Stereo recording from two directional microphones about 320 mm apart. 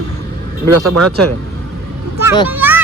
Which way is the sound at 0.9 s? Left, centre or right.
Right.